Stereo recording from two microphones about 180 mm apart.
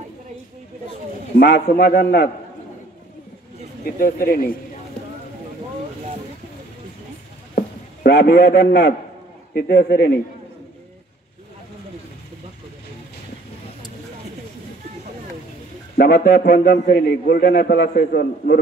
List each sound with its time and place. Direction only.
1.4 s a man's voice: 65° left (ahead or behind)
3.8 s speech: 55° left (ahead or behind)
7.5 s a man's voice: 65° left (ahead or behind)
16.0 s a man's voice: 65° left (ahead or behind)